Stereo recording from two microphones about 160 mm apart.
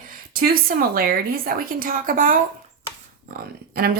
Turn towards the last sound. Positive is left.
turn(degrees=-70)  # may be behind; listen again after turning